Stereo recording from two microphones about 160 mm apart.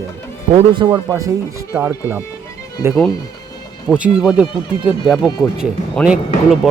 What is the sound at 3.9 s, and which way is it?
Speech, 5° right (ahead or behind).